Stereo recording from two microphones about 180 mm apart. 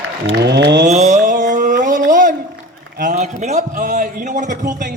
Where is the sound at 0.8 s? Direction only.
40° right (ahead or behind).